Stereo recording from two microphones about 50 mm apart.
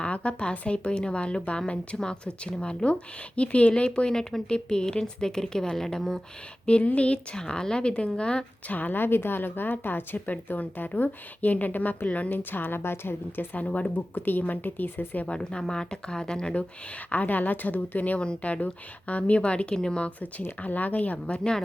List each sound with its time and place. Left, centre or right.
0.0 s a woman's voice: left; by 6.1 s centre
6.8 s speech: left
8.7 s a woman's voice: left
12.5 s a woman's voice: left
15.3 s speech: centre
17.1 s a woman's voice: left
18.2 s speech: left
20.6 s speech: left